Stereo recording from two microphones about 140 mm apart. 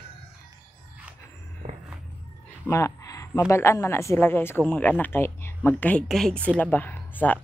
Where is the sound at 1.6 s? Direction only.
40° right (ahead or behind).